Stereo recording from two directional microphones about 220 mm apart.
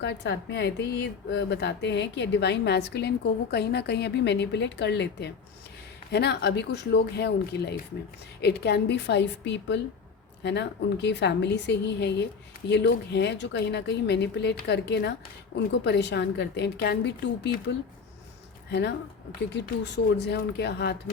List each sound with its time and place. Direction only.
0.0 s a woman's voice: 50° left (ahead or behind)